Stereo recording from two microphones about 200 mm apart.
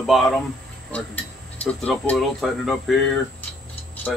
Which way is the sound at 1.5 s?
5° left (ahead or behind).